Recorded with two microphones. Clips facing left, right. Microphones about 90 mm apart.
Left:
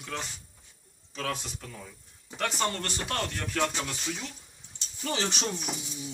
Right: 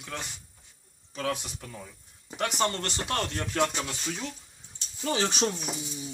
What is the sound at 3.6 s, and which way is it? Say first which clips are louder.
Speech: right 2 dB; 10° right (ahead or behind).